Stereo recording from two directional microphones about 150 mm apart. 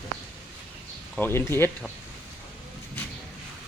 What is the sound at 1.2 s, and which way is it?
Speech, 15° left (ahead or behind).